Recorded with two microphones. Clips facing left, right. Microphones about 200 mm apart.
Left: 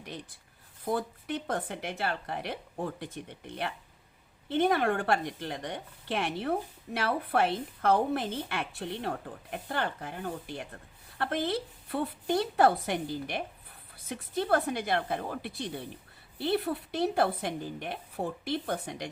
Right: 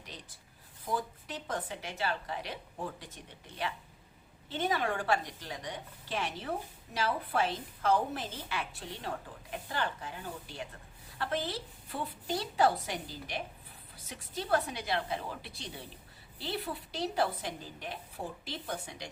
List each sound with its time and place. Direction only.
0.9 s a woman's voice: 60° left (ahead or behind)
4.4 s a woman's voice: 60° left (ahead or behind)